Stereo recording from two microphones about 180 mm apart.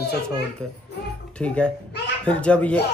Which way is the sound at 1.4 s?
5° left (ahead or behind).